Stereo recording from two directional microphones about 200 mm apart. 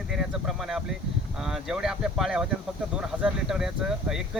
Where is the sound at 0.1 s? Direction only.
Centre (ahead or behind).